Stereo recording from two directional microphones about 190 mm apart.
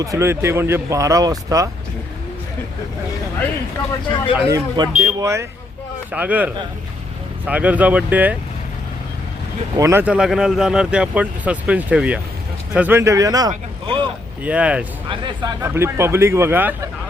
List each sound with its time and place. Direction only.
0.0 s speech: 15° right (ahead or behind)
4.4 s speech: 15° right (ahead or behind)
9.7 s speech: 15° right (ahead or behind)
14.4 s speech: 5° right (ahead or behind)
15.1 s speech: 25° right (ahead or behind)
15.6 s speech: 15° right (ahead or behind)